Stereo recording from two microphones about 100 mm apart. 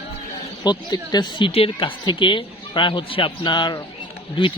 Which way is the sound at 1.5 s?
65° left (ahead or behind).